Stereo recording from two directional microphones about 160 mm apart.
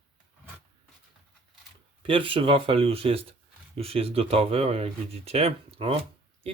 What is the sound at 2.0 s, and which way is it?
Speech, 35° right (ahead or behind).